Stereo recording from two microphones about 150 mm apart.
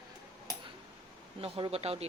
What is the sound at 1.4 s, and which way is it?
Speech, 40° right (ahead or behind).